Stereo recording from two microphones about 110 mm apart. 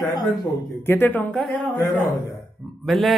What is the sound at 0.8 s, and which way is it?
Speech, 20° left (ahead or behind).